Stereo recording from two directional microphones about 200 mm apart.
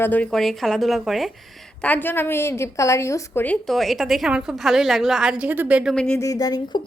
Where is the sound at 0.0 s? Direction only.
10° left (ahead or behind).